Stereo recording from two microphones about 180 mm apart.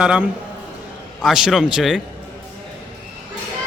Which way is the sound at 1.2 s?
Centre (ahead or behind).